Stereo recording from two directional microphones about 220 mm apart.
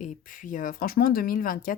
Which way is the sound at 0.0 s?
35° left (ahead or behind).